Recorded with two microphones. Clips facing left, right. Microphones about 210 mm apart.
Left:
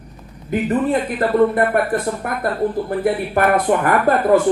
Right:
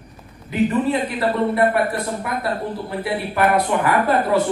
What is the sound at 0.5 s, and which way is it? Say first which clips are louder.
A woman's voice: left 1 dB; 50° left (ahead or behind).